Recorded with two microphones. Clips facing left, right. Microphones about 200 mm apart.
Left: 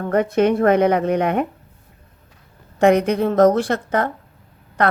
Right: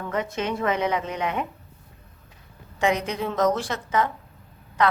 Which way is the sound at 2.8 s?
60° left (ahead or behind).